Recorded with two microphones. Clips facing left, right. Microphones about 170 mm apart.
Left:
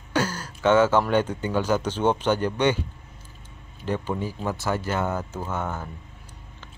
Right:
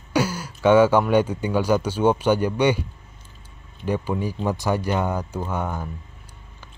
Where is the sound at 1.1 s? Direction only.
10° right (ahead or behind).